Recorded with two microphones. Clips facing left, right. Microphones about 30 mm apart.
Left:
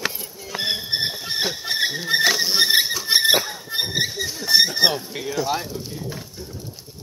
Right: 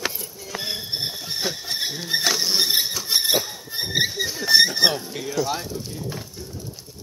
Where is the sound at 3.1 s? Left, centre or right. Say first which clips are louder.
Left 5 dB; left.